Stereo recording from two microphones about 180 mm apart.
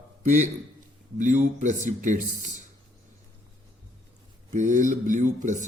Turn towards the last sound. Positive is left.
turn(degrees=-45)  # may be behind; listen again after turning